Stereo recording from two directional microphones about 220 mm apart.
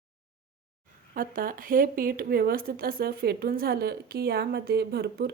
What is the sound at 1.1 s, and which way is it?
A woman's voice, 40° right (ahead or behind).